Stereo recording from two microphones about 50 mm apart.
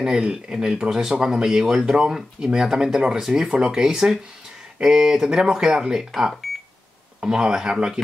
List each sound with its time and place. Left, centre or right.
0.0 s speech: centre